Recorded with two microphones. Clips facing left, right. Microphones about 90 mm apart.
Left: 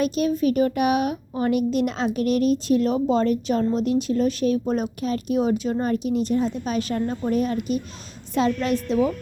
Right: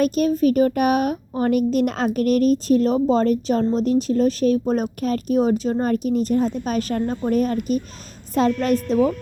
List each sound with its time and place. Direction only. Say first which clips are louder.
0.0 s a woman's voice: right 3 dB; 45° right (ahead or behind)